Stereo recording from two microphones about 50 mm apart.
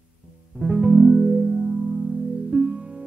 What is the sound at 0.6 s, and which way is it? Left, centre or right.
Music, centre.